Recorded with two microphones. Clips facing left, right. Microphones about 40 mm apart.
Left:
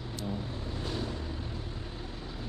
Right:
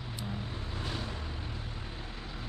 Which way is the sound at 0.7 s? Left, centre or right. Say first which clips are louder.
Left 3 dB; centre.